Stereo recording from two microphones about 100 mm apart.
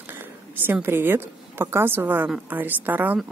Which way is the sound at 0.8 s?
25° right (ahead or behind).